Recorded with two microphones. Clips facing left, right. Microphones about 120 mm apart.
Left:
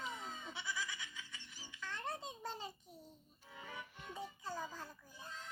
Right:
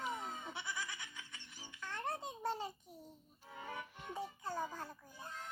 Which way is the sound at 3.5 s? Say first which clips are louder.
Right 4 dB; 50° right (ahead or behind).